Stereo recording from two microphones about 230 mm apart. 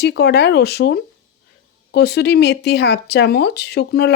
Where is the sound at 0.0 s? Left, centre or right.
Left.